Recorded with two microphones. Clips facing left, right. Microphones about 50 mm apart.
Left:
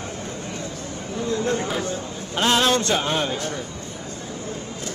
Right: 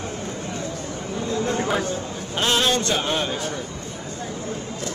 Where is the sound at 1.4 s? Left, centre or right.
Right.